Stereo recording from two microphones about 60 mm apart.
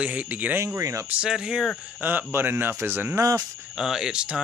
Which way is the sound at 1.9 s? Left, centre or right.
Right.